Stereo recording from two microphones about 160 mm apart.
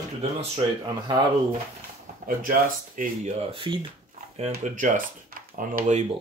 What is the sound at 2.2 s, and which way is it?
Speech, 60° right (ahead or behind).